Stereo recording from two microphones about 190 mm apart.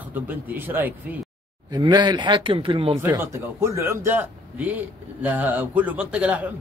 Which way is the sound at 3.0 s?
15° right (ahead or behind).